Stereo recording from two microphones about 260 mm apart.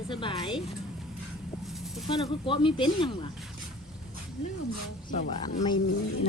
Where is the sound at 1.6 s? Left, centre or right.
Centre.